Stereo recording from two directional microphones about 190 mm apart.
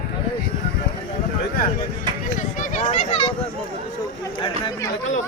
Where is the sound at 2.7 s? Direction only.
35° left (ahead or behind).